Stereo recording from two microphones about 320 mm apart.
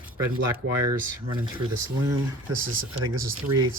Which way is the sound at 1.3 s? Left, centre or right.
Centre.